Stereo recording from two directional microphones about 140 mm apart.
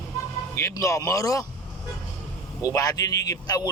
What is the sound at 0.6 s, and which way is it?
Speech, 20° left (ahead or behind).